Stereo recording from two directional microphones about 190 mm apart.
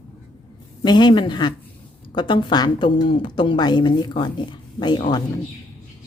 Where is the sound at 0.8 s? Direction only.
20° left (ahead or behind).